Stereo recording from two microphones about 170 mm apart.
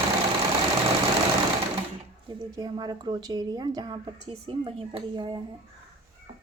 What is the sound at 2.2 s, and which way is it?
A woman's voice, 20° right (ahead or behind).